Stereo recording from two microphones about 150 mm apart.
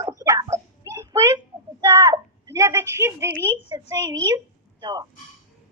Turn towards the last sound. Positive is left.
turn(degrees=-25)  # may be behind; listen again after turning